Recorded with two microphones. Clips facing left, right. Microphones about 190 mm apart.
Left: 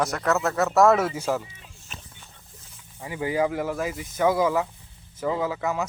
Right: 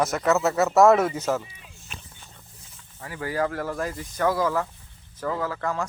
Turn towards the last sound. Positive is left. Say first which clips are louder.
# left 2 dB
turn(degrees=10)  # may be behind; listen again after turning